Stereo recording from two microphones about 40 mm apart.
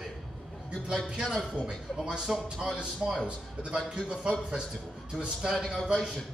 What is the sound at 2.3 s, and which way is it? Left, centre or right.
A man's voice, centre.